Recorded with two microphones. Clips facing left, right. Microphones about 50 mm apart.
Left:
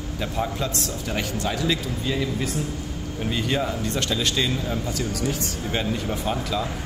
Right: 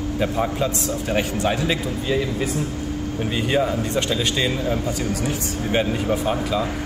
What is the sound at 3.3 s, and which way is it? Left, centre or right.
Speech, right.